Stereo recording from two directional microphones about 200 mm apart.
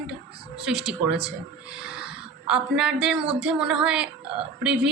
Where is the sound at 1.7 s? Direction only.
5° right (ahead or behind).